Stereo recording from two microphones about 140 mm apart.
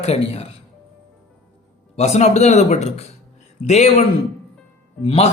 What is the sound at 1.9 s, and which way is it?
Speech, 50° left (ahead or behind).